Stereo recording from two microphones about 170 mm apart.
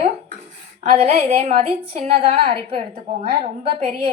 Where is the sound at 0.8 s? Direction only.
35° right (ahead or behind).